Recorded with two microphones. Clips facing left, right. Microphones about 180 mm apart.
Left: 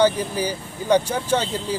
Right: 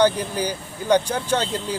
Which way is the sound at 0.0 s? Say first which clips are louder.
Even; 10° left (ahead or behind).